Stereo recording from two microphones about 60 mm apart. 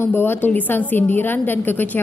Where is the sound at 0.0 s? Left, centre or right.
Left.